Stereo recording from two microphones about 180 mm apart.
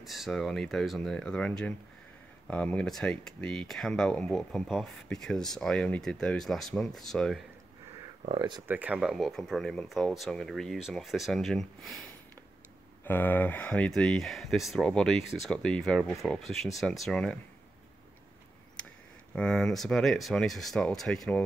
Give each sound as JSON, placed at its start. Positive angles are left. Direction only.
{"t": 0.0, "sound": "speech", "side_deg": 0}
{"t": 8.3, "sound": "speech", "side_deg": -25}
{"t": 8.6, "sound": "speech", "side_deg": -10}
{"t": 18.8, "sound": "a sound", "side_deg": 5}
{"t": 19.3, "sound": "speech", "side_deg": 5}